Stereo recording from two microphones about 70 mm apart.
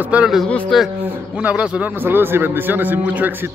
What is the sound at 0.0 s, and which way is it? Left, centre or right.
Speech, centre.